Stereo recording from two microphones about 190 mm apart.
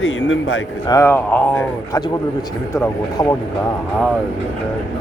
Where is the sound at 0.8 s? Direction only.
15° left (ahead or behind).